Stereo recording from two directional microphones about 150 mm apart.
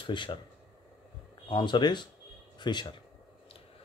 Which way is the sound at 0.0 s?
30° left (ahead or behind).